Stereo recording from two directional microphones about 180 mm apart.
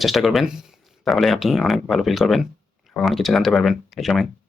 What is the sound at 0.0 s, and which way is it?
Speech, centre (ahead or behind).